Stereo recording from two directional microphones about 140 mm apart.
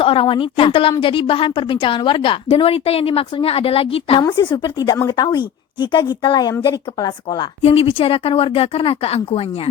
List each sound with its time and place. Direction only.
0.0 s a woman's voice: 40° left (ahead or behind)
4.2 s a woman's voice: 30° left (ahead or behind)
7.6 s speech: 45° left (ahead or behind)